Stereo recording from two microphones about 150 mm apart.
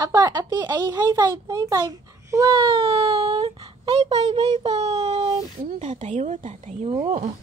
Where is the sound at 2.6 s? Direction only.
40° right (ahead or behind).